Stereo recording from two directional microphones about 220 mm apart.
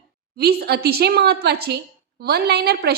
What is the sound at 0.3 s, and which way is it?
A woman's voice, 45° right (ahead or behind).